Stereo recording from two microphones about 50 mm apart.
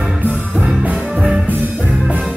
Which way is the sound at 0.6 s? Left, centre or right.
Right.